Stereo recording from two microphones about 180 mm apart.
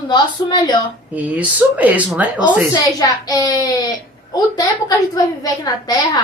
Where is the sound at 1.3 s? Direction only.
10° right (ahead or behind).